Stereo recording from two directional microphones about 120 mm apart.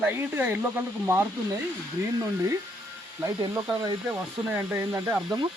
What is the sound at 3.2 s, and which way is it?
Speech, 20° right (ahead or behind).